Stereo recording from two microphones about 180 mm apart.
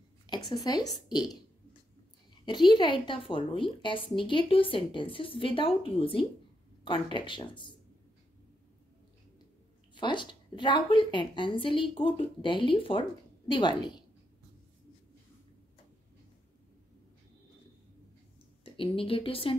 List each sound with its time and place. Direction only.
0.3 s a woman's voice: 25° left (ahead or behind)
2.4 s a woman's voice: 25° left (ahead or behind)
9.9 s a woman's voice: 25° left (ahead or behind)
18.9 s speech: 30° left (ahead or behind)